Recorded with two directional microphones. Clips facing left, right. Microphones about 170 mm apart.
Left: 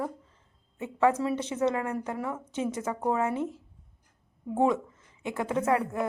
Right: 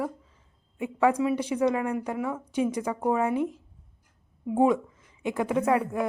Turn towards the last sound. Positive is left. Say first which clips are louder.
# right 2 dB
turn(degrees=-15)  # may be behind; listen again after turning